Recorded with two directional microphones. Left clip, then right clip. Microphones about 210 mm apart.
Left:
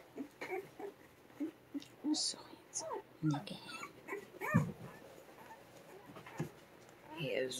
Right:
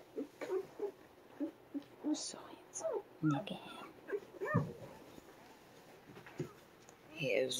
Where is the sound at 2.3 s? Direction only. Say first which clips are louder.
Left 2 dB; 5° right (ahead or behind).